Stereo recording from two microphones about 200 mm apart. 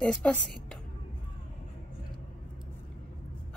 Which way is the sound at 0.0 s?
5° left (ahead or behind).